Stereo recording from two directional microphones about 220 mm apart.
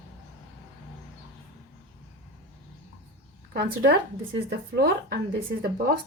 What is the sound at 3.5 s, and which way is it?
Speech, 45° right (ahead or behind).